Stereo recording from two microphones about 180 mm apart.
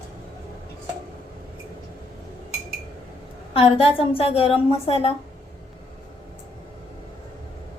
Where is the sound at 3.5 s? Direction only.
30° left (ahead or behind).